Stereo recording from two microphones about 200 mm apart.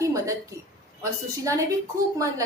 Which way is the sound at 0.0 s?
15° right (ahead or behind).